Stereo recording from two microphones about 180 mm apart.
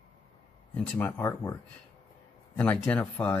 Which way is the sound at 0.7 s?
10° left (ahead or behind).